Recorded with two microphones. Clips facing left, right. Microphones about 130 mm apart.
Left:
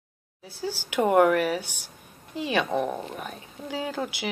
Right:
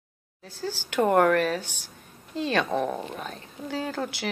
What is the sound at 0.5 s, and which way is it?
Speech, 15° left (ahead or behind).